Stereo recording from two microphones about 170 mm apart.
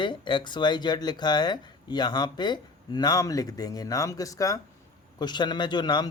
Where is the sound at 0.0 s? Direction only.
25° left (ahead or behind).